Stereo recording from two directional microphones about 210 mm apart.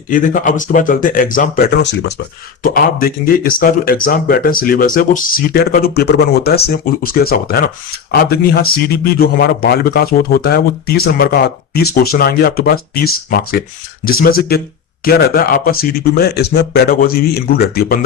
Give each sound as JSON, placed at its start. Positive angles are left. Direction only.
{"t": 0.1, "sound": "speech", "side_deg": 40}
{"t": 2.6, "sound": "a man's voice", "side_deg": 45}